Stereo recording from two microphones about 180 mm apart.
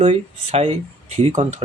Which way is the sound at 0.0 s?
35° right (ahead or behind).